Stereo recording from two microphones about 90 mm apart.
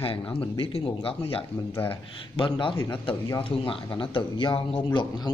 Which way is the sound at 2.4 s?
70° left (ahead or behind).